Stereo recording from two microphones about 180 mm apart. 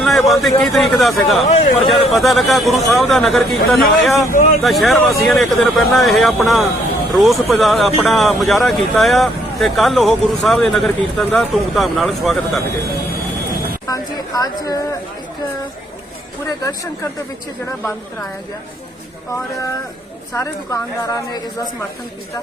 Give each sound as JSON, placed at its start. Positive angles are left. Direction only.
{"t": 0.0, "sound": "a man's voice", "side_deg": 0}
{"t": 14.4, "sound": "speech", "side_deg": 20}
{"t": 16.5, "sound": "speech", "side_deg": 20}
{"t": 20.3, "sound": "speech", "side_deg": 15}